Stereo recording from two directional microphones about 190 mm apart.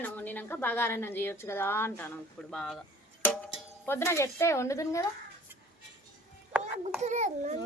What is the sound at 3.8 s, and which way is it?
A woman's voice, 15° left (ahead or behind).